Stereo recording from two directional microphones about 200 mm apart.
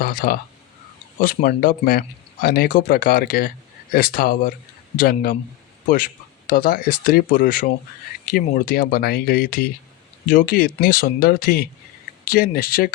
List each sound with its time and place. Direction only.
0.0 s speech: 50° left (ahead or behind)
6.5 s speech: 45° left (ahead or behind)